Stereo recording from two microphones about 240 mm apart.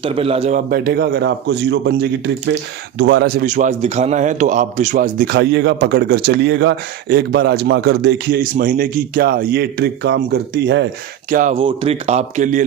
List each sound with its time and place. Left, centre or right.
0.0 s a man's voice: right
11.3 s speech: right